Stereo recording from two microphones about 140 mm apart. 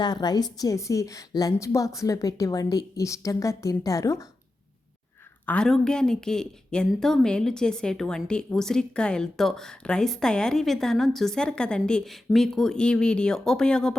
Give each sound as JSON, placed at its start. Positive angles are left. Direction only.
{"t": 0.0, "sound": "a woman's voice", "side_deg": 30}
{"t": 5.5, "sound": "a woman's voice", "side_deg": 5}